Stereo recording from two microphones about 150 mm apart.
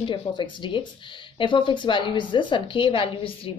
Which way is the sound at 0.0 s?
30° left (ahead or behind).